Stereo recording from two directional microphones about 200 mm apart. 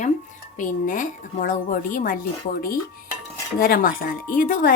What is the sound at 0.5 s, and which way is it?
Speech, 40° left (ahead or behind).